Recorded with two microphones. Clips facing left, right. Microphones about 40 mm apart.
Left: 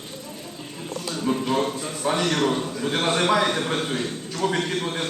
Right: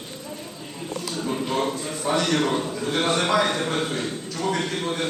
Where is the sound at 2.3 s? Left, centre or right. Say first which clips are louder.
Even; centre.